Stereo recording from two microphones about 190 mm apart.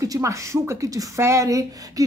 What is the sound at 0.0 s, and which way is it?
A woman's voice, 15° right (ahead or behind).